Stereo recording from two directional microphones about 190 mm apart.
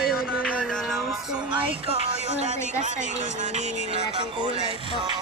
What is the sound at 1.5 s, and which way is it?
Speech, 30° right (ahead or behind).